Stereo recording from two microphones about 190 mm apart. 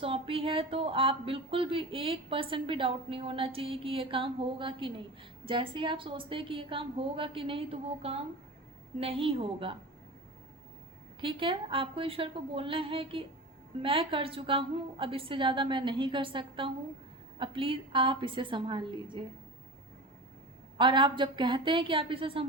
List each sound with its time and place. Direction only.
0.0 s speech: 30° right (ahead or behind)
11.2 s speech: 25° right (ahead or behind)
20.7 s speech: 25° right (ahead or behind)